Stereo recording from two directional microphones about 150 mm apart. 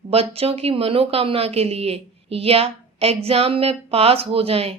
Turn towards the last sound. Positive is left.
turn(degrees=-40)  # may be behind; listen again after turning